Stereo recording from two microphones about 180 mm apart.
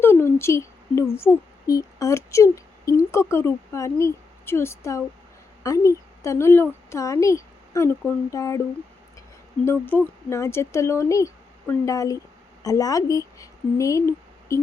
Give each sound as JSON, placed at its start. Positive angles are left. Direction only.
{"t": 0.0, "sound": "a woman's voice", "side_deg": 15}
{"t": 9.6, "sound": "a woman's voice", "side_deg": 10}